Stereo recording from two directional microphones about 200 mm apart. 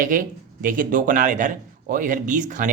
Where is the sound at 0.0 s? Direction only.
45° right (ahead or behind).